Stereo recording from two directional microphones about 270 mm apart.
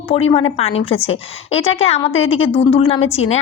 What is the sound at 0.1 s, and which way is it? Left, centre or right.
A woman's voice, left.